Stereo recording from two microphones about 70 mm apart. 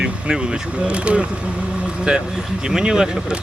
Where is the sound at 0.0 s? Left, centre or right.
Centre.